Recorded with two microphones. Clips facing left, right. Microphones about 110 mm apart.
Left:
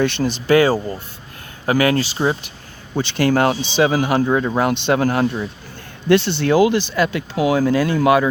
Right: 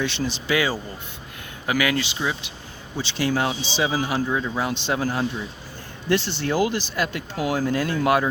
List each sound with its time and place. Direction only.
0.0 s speech: 50° left (ahead or behind)
2.9 s speech: 55° left (ahead or behind); by 7.9 s 90° left